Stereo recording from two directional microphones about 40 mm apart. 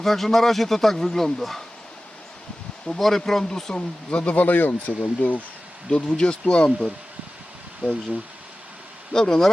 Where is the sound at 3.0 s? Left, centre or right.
Centre.